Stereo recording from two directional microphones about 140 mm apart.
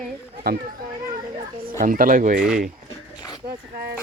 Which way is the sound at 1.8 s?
85° right.